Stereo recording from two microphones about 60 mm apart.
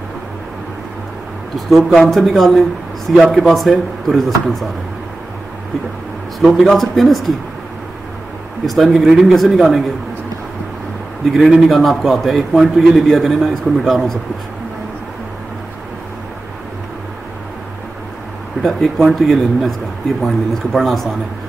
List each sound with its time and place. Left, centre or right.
1.7 s a man's voice: centre
6.4 s a man's voice: centre
8.6 s a man's voice: centre
11.7 s a man's voice: centre
18.6 s a man's voice: centre